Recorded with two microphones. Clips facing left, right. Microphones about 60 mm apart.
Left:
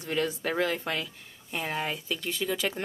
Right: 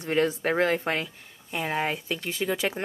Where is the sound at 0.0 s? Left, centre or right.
Right.